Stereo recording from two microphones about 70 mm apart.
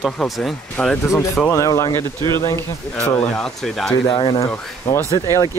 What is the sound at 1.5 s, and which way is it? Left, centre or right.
Speech, left.